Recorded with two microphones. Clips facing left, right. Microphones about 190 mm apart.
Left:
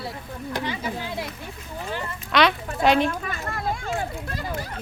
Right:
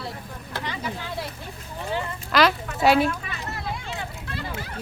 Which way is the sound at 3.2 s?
50° left (ahead or behind).